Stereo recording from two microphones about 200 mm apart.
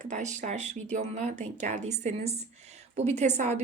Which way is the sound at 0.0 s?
35° right (ahead or behind).